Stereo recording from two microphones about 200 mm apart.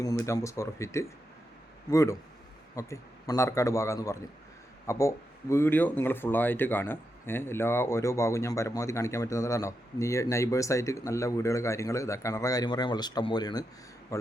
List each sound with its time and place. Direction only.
0.0 s speech: 15° left (ahead or behind)